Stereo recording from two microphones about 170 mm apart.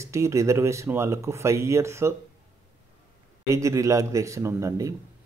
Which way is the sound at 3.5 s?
20° right (ahead or behind).